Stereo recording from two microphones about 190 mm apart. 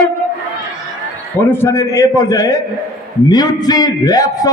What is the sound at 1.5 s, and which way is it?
A man's voice, 15° left (ahead or behind).